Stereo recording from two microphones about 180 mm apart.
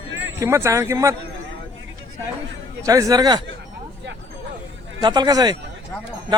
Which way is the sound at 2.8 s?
20° right (ahead or behind).